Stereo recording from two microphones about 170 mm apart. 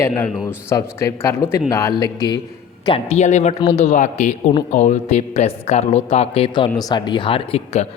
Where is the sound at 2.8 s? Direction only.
35° left (ahead or behind).